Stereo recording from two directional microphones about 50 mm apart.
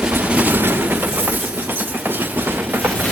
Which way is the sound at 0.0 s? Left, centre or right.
Right.